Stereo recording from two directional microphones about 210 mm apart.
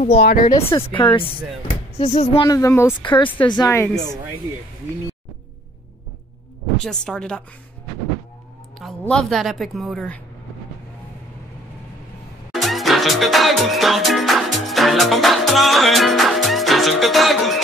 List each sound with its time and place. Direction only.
0.2 s speech: 45° left (ahead or behind)
0.8 s speech: 25° left (ahead or behind)
2.4 s speech: 15° left (ahead or behind)
3.9 s a woman's voice: centre (ahead or behind)
7.1 s a woman's voice: 5° left (ahead or behind)
8.7 s a woman's voice: centre (ahead or behind)
12.5 s music: centre (ahead or behind)